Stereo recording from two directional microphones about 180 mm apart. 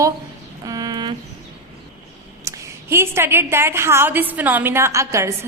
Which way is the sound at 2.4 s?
15° right (ahead or behind).